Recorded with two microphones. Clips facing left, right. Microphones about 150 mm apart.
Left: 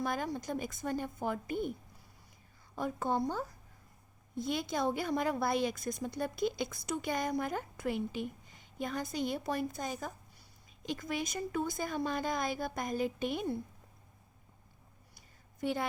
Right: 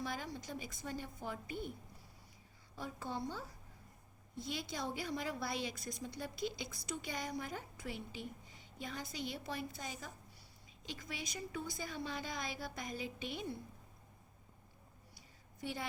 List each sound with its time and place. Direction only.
0.0 s a woman's voice: 55° left (ahead or behind)
2.7 s a woman's voice: 50° left (ahead or behind)
15.6 s a woman's voice: 55° left (ahead or behind)